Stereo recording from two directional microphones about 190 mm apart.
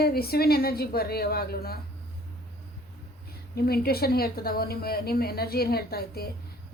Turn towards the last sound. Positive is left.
turn(degrees=55)  # may be behind; listen again after turning